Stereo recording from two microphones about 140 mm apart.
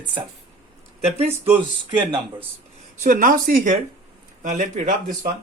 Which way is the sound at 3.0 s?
70° right (ahead or behind).